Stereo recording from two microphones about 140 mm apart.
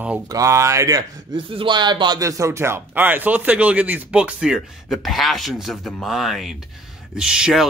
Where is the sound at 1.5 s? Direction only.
35° right (ahead or behind).